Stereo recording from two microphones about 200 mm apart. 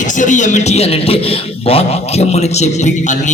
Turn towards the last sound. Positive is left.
turn(degrees=35)  # may be behind; listen again after turning